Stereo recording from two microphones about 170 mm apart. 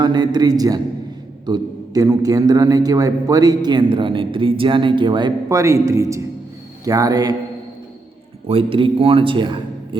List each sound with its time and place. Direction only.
0.0 s a man's voice: 25° right (ahead or behind)
8.4 s a man's voice: 30° right (ahead or behind)